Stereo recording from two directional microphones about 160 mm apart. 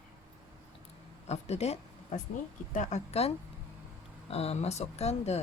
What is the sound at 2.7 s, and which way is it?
Speech, 50° left (ahead or behind).